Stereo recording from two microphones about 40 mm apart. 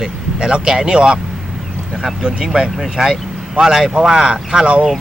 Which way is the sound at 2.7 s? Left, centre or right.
Centre.